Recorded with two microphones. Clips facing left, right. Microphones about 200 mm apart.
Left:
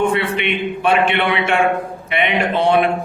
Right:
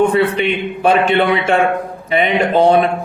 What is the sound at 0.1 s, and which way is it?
Speech, 35° right (ahead or behind).